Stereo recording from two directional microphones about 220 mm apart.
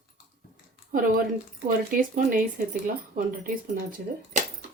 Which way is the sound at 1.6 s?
40° right (ahead or behind).